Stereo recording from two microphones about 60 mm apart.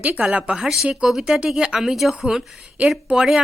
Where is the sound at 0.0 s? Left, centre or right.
Right.